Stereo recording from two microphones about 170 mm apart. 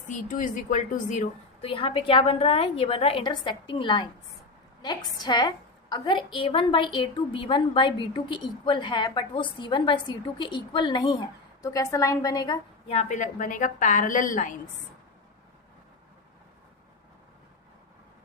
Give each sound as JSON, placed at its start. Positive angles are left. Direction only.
{"t": 0.1, "sound": "a woman's voice", "side_deg": 45}
{"t": 1.6, "sound": "a woman's voice", "side_deg": 30}
{"t": 5.2, "sound": "a woman's voice", "side_deg": 25}
{"t": 12.9, "sound": "a woman's voice", "side_deg": 40}